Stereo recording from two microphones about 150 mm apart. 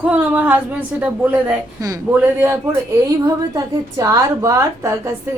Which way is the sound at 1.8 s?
25° right (ahead or behind).